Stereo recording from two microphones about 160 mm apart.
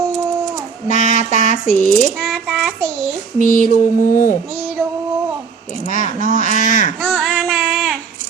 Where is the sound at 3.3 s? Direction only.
60° left (ahead or behind).